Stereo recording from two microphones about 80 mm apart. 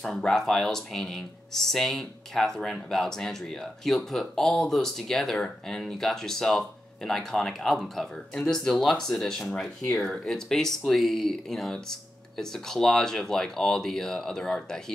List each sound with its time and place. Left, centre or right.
0.0 s speech: centre